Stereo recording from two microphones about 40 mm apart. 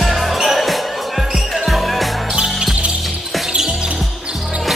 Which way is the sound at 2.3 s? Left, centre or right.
Centre.